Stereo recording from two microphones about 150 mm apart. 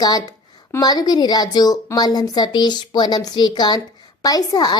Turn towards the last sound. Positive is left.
turn(degrees=25)  # may be behind; listen again after turning